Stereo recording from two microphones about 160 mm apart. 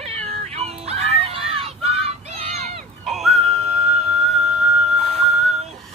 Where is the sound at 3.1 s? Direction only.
Centre (ahead or behind).